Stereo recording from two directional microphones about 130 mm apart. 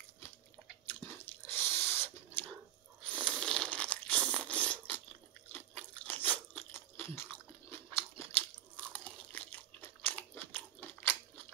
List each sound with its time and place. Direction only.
0.8 s chewing: 15° left (ahead or behind)
3.3 s crunch: 5° left (ahead or behind)